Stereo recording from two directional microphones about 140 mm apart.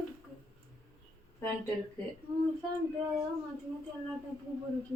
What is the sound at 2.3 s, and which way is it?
Speech, 25° right (ahead or behind).